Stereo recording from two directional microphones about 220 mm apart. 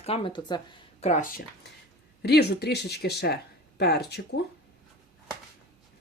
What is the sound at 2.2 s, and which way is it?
Speech, 45° left (ahead or behind).